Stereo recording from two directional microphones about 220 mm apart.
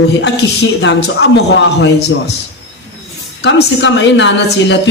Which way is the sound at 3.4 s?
50° left (ahead or behind).